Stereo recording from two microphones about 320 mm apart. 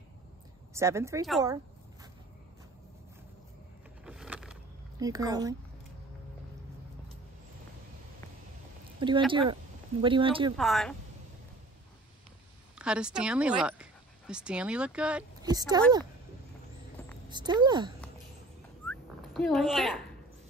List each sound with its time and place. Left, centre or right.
0.7 s speech: centre
4.0 s a sound: centre
9.3 s speech: centre
10.6 s speech: centre
12.7 s speech: centre
17.3 s speech: centre
18.9 s a sound: centre